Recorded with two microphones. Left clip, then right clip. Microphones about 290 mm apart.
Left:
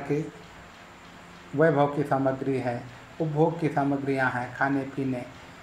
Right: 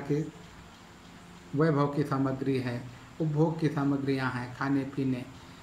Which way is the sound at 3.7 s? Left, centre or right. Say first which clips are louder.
Left 4 dB; left.